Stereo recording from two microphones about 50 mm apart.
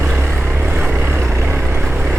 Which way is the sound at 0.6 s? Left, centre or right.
Right.